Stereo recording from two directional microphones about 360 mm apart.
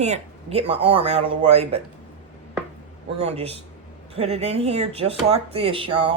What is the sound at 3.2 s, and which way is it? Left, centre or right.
Speech, centre.